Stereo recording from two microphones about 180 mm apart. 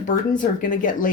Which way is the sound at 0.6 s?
45° left (ahead or behind).